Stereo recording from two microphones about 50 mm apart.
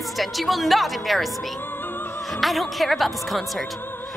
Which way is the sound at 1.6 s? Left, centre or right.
Left.